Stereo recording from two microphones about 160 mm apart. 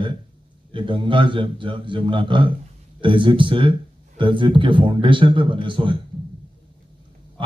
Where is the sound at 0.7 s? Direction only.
30° right (ahead or behind).